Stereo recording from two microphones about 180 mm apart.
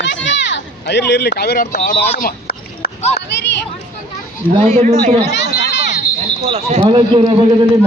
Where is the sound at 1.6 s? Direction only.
45° left (ahead or behind).